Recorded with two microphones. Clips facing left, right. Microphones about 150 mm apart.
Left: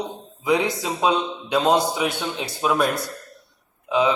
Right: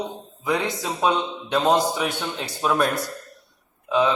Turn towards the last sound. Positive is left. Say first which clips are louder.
# left 1 dB
turn(degrees=15)  # may be behind; listen again after turning